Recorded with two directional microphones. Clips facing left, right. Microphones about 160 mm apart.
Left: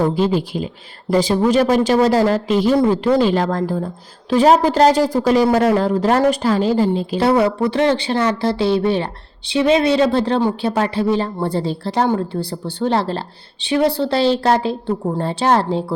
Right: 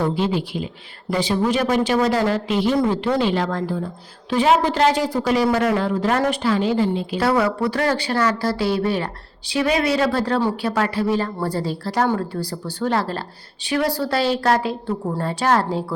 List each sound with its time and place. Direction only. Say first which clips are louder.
0.0 s a woman's voice: left 4 dB; 40° left (ahead or behind)
7.2 s speech: left 4 dB; 25° left (ahead or behind)